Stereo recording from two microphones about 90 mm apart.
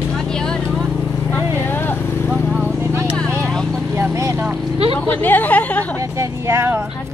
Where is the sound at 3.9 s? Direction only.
30° right (ahead or behind).